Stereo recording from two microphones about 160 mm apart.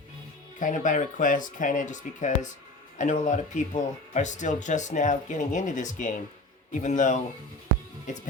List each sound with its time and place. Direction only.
0.6 s speech: 50° left (ahead or behind)